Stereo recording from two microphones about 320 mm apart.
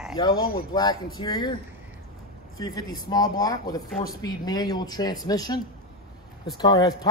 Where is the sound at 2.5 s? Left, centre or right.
Centre.